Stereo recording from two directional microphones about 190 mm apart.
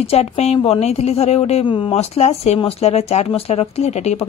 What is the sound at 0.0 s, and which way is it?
A woman's voice, 30° left (ahead or behind).